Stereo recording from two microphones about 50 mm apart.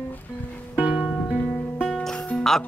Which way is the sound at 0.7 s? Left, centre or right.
Right.